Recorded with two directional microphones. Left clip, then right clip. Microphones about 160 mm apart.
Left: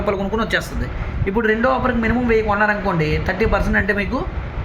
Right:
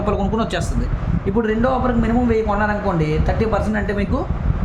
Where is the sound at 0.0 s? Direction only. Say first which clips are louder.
Even; 45° right (ahead or behind).